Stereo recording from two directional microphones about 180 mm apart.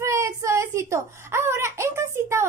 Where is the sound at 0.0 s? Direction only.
15° right (ahead or behind).